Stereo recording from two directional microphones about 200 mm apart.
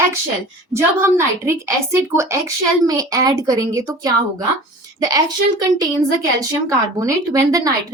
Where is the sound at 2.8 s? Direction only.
20° right (ahead or behind).